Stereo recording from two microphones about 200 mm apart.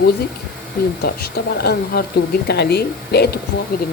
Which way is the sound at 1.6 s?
50° left (ahead or behind).